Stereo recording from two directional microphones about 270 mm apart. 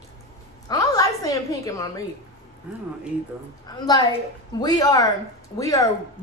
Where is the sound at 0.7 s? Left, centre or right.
Centre.